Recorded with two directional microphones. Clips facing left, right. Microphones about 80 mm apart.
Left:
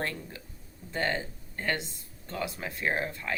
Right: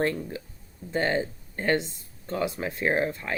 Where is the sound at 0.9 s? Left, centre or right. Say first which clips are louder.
Right 5 dB; right.